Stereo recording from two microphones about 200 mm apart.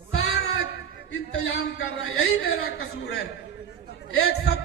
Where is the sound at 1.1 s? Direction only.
55° left (ahead or behind).